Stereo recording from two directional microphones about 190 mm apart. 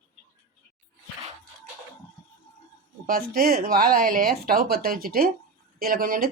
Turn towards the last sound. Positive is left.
turn(degrees=-50)  # may be behind; listen again after turning